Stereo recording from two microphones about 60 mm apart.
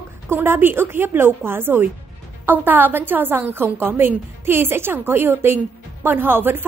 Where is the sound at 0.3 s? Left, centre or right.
Right.